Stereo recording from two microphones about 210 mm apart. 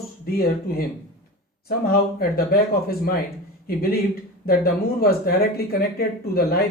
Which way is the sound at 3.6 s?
45° left (ahead or behind).